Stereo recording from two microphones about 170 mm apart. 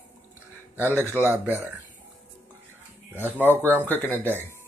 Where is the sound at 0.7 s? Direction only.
15° right (ahead or behind).